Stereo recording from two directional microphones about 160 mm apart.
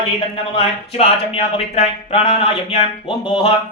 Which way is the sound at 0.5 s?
35° left (ahead or behind).